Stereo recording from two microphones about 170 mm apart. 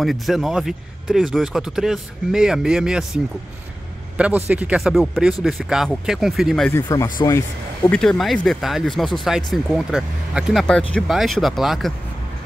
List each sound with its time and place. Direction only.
0.0 s speech: centre (ahead or behind)
4.2 s speech: 10° right (ahead or behind)
6.7 s speech: 15° left (ahead or behind)
8.0 s speech: centre (ahead or behind)